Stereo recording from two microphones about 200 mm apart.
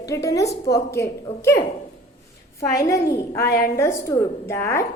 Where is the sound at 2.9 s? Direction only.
15° left (ahead or behind).